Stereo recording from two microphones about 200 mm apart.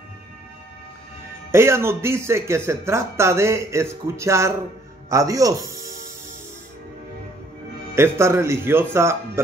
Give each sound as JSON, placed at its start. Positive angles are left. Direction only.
{"t": 1.5, "sound": "speech", "side_deg": -10}
{"t": 7.9, "sound": "speech", "side_deg": -10}